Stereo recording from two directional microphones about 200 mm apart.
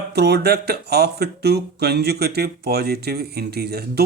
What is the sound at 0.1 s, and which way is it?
Speech, 55° right (ahead or behind).